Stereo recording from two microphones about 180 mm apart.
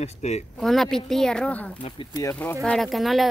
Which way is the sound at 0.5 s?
Centre (ahead or behind).